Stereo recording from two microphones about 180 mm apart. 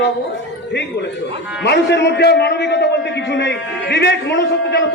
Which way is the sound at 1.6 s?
70° left (ahead or behind).